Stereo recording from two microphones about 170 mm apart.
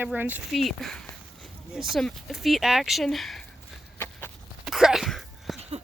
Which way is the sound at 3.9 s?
15° left (ahead or behind).